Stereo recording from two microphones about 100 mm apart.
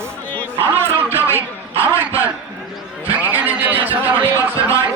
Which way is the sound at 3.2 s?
15° right (ahead or behind).